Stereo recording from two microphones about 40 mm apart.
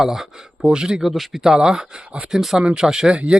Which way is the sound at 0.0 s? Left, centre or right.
Centre.